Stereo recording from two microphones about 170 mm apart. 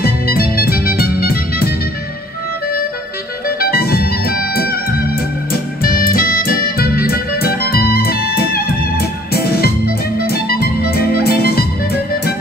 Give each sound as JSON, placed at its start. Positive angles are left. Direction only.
{"t": 0.0, "sound": "music", "side_deg": 65}
{"t": 3.4, "sound": "music", "side_deg": 65}